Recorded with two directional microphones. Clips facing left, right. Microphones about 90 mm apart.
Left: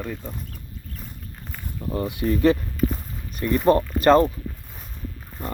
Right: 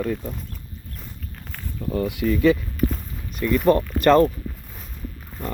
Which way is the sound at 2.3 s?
40° left (ahead or behind).